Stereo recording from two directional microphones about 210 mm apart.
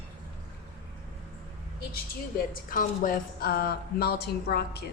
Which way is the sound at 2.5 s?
40° left (ahead or behind).